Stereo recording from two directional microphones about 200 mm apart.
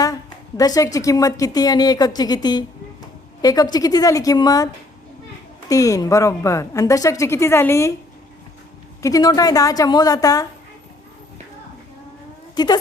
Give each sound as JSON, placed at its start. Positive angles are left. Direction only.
{"t": 0.0, "sound": "a sound", "side_deg": 15}
{"t": 0.9, "sound": "a woman's voice", "side_deg": 15}
{"t": 9.0, "sound": "a woman's voice", "side_deg": 15}
{"t": 12.5, "sound": "a woman's voice", "side_deg": 20}